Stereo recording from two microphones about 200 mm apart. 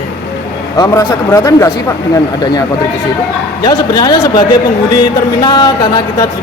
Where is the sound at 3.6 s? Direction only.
20° left (ahead or behind).